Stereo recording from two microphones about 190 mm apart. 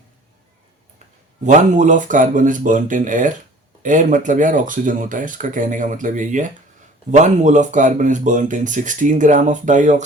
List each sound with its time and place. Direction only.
1.5 s speech: 40° right (ahead or behind)